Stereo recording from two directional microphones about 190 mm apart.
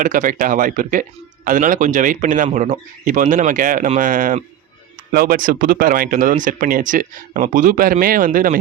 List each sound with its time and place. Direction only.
0.0 s speech: 45° right (ahead or behind)